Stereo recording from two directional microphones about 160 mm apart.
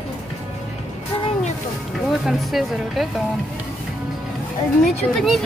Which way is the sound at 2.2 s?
Centre (ahead or behind).